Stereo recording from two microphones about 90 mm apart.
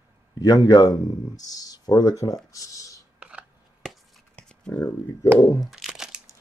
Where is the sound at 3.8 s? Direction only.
5° left (ahead or behind).